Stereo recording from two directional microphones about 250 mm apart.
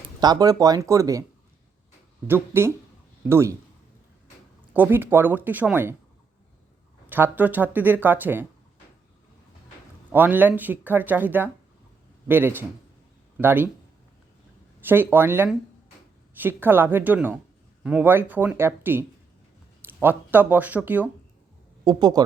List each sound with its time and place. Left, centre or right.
0.2 s speech: centre
2.2 s speech: centre
4.7 s speech: centre
7.1 s speech: centre
10.1 s speech: centre
14.8 s speech: centre